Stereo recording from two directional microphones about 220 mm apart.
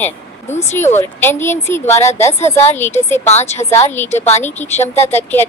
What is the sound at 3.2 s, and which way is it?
Speech, 30° left (ahead or behind).